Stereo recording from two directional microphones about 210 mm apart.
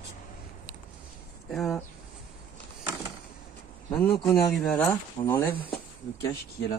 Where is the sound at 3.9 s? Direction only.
10° left (ahead or behind).